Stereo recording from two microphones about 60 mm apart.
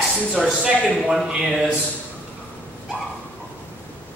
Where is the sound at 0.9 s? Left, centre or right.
Centre.